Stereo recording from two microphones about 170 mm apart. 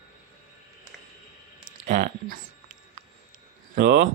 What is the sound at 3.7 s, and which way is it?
Speech, 55° right (ahead or behind).